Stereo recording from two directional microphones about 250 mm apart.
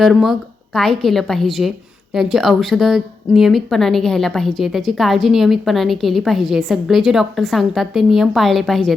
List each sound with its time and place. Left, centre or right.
0.0 s a woman's voice: centre